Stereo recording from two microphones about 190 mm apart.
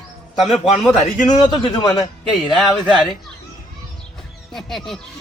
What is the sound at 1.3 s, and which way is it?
Speech, 20° left (ahead or behind).